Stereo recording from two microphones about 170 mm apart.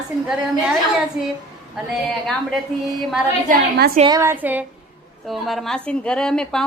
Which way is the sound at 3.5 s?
65° right (ahead or behind).